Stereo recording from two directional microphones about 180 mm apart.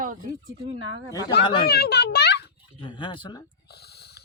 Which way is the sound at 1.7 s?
60° left (ahead or behind).